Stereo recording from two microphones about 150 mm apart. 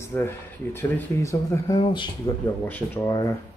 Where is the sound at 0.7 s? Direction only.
15° left (ahead or behind).